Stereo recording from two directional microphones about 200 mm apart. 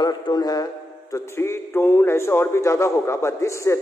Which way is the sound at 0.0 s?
20° left (ahead or behind).